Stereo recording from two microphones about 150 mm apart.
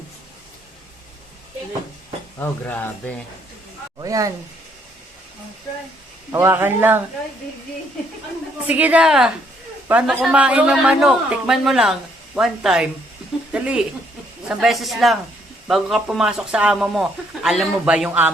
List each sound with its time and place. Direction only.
2.4 s speech: 15° left (ahead or behind)
4.0 s speech: 25° right (ahead or behind)
6.3 s a woman's voice: 15° right (ahead or behind)
8.6 s a woman's voice: 10° right (ahead or behind)